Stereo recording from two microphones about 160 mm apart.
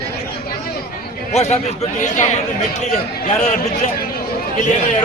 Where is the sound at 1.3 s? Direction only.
45° left (ahead or behind).